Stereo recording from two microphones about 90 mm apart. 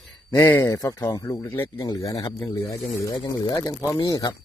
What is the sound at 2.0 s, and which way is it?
Speech, 40° left (ahead or behind).